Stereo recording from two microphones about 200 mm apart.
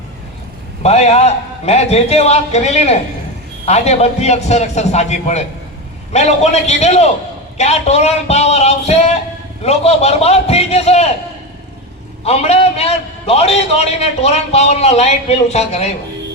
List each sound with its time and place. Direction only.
0.8 s a man's voice: 30° left (ahead or behind)
12.2 s a man's voice: 30° left (ahead or behind)